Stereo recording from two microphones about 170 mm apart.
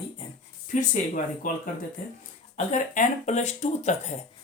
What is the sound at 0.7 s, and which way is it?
Speech, 50° left (ahead or behind).